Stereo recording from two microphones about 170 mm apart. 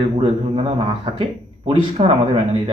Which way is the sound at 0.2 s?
35° right (ahead or behind).